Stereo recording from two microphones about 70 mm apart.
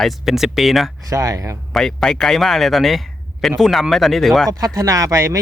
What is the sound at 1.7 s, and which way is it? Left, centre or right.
Speech, centre.